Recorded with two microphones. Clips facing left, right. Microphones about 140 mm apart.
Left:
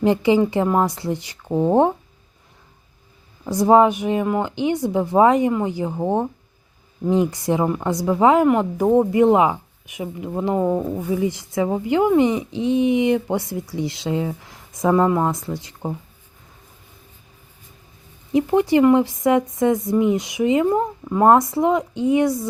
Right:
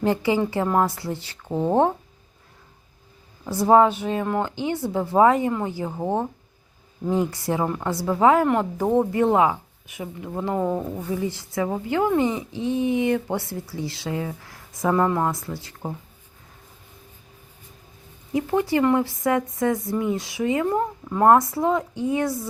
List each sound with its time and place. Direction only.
0.0 s a woman's voice: 20° left (ahead or behind)
3.4 s a woman's voice: 15° left (ahead or behind)
18.3 s speech: 20° left (ahead or behind)